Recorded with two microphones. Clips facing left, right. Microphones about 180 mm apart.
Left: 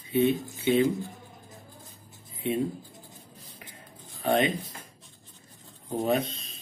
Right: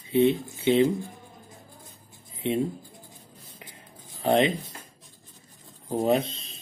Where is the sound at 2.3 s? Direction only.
25° right (ahead or behind).